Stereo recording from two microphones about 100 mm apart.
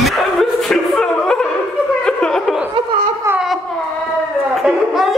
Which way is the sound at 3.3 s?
25° right (ahead or behind).